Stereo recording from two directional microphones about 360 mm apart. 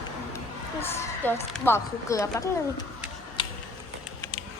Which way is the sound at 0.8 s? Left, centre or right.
Centre.